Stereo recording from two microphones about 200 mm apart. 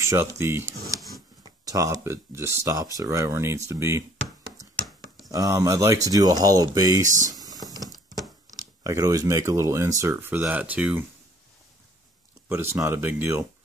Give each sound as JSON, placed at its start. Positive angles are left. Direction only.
{"t": 0.0, "sound": "speech", "side_deg": -15}
{"t": 4.8, "sound": "a sound", "side_deg": 0}
{"t": 5.3, "sound": "speech", "side_deg": -15}
{"t": 7.2, "sound": "typing", "side_deg": -20}
{"t": 8.5, "sound": "speech", "side_deg": -20}
{"t": 12.4, "sound": "speech", "side_deg": -10}